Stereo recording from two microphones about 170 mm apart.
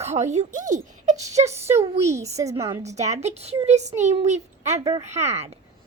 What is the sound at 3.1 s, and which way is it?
Speech, 40° right (ahead or behind).